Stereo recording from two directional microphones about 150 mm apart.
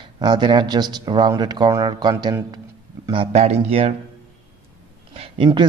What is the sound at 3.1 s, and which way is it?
Speech, 40° right (ahead or behind).